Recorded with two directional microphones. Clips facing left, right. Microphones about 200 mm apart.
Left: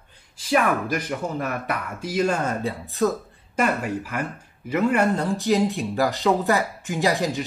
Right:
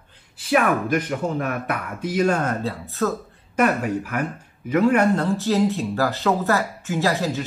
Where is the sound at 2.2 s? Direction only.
10° left (ahead or behind).